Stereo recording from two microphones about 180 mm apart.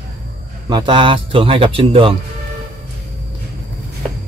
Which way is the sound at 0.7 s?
25° right (ahead or behind).